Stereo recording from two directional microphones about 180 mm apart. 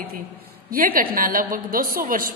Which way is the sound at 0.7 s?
50° right (ahead or behind).